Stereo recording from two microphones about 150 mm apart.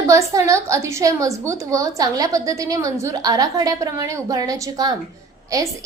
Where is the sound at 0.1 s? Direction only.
20° right (ahead or behind).